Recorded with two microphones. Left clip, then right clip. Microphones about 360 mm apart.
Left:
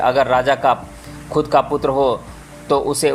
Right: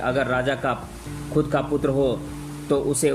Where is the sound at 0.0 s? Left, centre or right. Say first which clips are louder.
Left 8 dB; centre.